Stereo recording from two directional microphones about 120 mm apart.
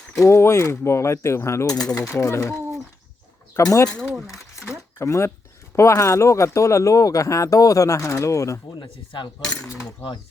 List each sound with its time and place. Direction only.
0.1 s speech: 20° left (ahead or behind)
4.0 s speech: 5° right (ahead or behind)
4.6 s a sound: 20° left (ahead or behind)
5.7 s speech: 25° left (ahead or behind)
8.7 s speech: 40° left (ahead or behind)
9.6 s speech: 25° left (ahead or behind)